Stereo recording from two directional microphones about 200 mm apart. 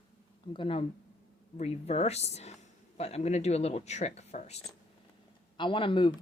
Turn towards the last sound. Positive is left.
turn(degrees=25)  # may be behind; listen again after turning